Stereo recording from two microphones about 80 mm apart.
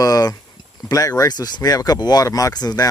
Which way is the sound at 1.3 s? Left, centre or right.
Left.